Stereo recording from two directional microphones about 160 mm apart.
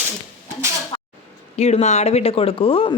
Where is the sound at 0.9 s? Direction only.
25° left (ahead or behind).